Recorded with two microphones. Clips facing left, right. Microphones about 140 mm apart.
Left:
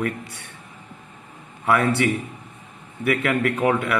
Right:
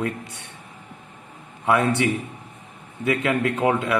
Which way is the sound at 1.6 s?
20° right (ahead or behind).